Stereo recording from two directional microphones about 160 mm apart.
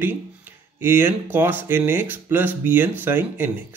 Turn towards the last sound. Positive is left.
turn(degrees=-15)  # may be behind; listen again after turning